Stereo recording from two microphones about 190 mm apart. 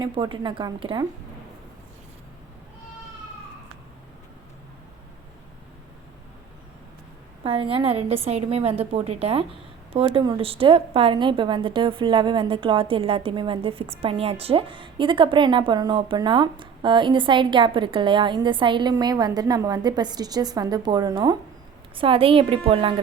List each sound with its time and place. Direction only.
0.0 s a woman's voice: 25° right (ahead or behind)
7.4 s a woman's voice: 30° right (ahead or behind)